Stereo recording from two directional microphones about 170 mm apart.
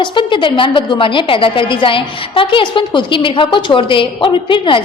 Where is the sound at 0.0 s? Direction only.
30° left (ahead or behind).